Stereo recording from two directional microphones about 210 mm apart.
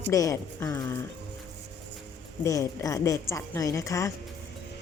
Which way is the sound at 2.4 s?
15° left (ahead or behind).